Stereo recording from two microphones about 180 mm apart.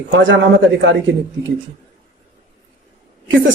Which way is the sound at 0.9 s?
90° right.